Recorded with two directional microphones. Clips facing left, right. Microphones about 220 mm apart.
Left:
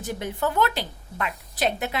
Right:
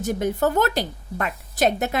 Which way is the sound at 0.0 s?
45° right (ahead or behind).